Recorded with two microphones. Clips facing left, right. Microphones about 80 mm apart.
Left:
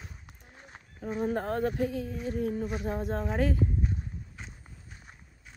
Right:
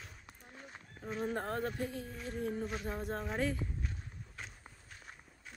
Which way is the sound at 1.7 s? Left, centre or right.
Left.